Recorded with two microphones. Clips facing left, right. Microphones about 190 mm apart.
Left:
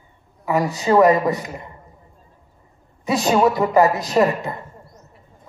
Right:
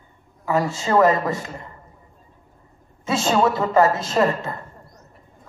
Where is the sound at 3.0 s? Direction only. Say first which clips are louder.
Left 2 dB; 15° left (ahead or behind).